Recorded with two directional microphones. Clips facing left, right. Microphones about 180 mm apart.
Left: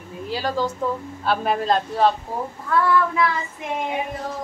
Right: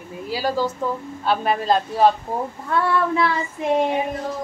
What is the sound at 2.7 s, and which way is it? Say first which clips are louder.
Child singing: left 1 dB; 25° right (ahead or behind).